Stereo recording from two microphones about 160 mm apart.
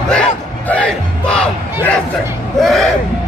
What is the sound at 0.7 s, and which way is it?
Crowd, 5° left (ahead or behind).